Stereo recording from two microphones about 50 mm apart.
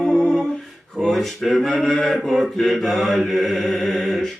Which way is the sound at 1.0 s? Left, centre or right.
Centre.